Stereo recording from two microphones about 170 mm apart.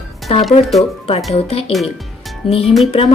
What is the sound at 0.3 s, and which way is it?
A woman's voice, 35° left (ahead or behind).